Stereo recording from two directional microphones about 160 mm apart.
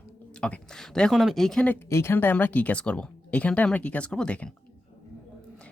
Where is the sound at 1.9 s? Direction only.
15° left (ahead or behind).